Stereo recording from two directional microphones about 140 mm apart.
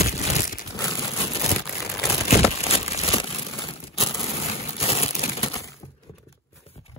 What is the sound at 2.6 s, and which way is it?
Crumpling, 45° left (ahead or behind).